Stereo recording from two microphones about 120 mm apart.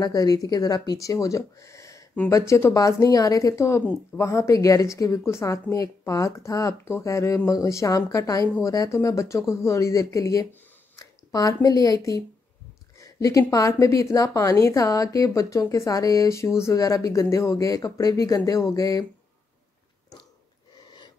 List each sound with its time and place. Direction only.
0.0 s a woman's voice: 35° left (ahead or behind)